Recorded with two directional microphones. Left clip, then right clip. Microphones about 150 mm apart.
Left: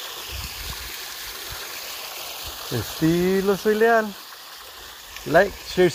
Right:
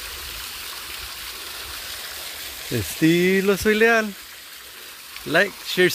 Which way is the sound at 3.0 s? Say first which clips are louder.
Right 2 dB; 55° right (ahead or behind).